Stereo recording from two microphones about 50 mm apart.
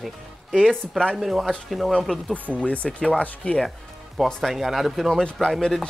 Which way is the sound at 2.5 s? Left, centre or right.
Left.